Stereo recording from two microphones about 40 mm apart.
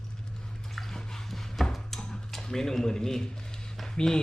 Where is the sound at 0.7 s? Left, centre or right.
Centre.